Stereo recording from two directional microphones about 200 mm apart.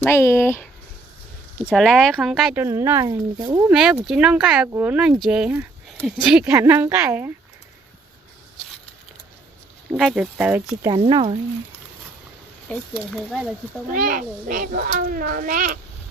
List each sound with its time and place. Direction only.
0.0 s speech: 10° left (ahead or behind)
1.7 s speech: centre (ahead or behind)
2.6 s speech: 15° right (ahead or behind)
3.7 s speech: 5° right (ahead or behind)
10.0 s speech: centre (ahead or behind)
10.8 s speech: 25° right (ahead or behind)
12.6 s speech: centre (ahead or behind)
13.9 s a child's voice: 45° right (ahead or behind)